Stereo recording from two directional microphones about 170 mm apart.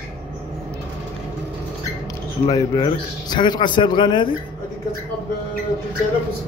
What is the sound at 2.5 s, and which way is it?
Speech, 20° left (ahead or behind).